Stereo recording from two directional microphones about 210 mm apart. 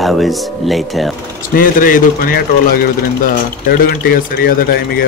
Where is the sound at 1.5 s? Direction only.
40° left (ahead or behind).